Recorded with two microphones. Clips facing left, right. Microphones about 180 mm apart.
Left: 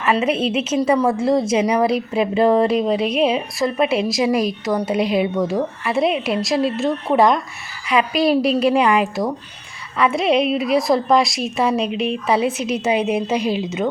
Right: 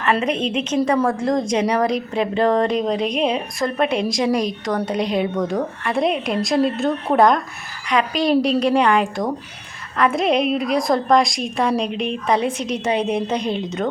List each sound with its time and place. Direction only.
0.0 s a woman's voice: 5° left (ahead or behind)